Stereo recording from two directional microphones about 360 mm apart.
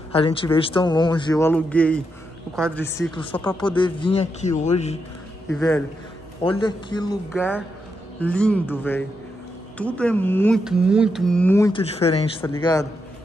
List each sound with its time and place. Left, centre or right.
0.1 s a man's voice: centre
5.5 s a man's voice: centre